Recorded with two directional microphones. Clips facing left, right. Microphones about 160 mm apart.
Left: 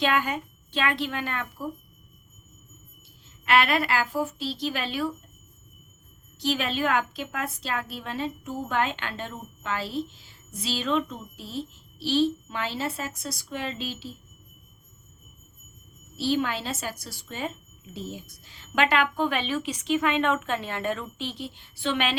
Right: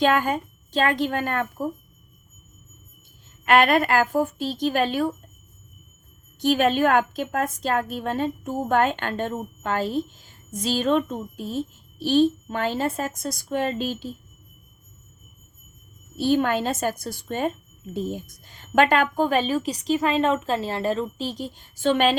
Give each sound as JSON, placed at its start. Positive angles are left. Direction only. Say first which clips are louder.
{"t": 0.0, "sound": "a woman's voice", "louder": "right 5 dB", "side_deg": -45}
{"t": 3.2, "sound": "a woman's voice", "louder": "right 5 dB", "side_deg": -50}
{"t": 6.4, "sound": "a woman's voice", "louder": "right 7 dB", "side_deg": -50}
{"t": 16.1, "sound": "a woman's voice", "louder": "right 5 dB", "side_deg": -50}